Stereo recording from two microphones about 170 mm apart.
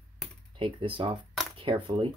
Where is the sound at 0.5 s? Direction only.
30° right (ahead or behind).